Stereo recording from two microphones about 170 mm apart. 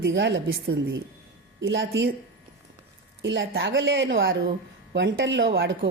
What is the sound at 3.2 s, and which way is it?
A woman's voice, 90° right.